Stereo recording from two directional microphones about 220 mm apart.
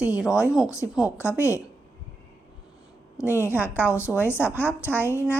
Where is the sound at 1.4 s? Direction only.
10° left (ahead or behind).